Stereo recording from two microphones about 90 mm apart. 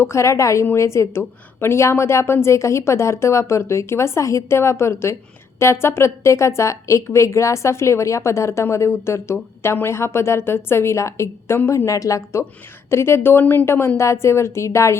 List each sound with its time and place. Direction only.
0.0 s a woman's voice: 30° left (ahead or behind)